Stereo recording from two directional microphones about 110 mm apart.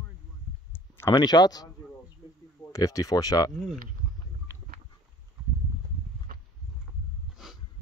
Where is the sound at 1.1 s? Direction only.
40° left (ahead or behind).